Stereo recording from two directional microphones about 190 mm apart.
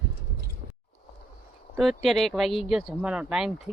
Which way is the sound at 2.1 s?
Centre (ahead or behind).